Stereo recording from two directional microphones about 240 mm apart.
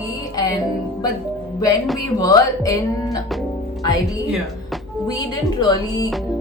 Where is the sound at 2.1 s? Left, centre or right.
Centre.